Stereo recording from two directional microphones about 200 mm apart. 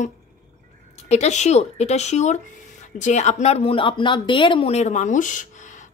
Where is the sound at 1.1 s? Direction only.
35° left (ahead or behind).